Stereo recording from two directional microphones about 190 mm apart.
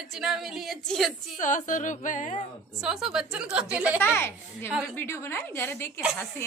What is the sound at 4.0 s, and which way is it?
A woman's voice, 10° left (ahead or behind).